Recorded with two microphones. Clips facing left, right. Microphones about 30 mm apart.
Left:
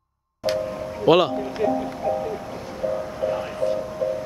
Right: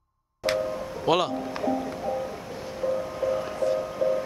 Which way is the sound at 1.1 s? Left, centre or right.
Centre.